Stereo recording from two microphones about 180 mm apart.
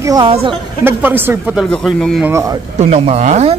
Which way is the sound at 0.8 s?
10° right (ahead or behind).